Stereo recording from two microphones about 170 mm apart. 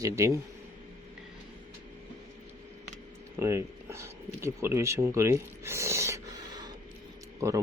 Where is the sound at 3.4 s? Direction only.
15° right (ahead or behind).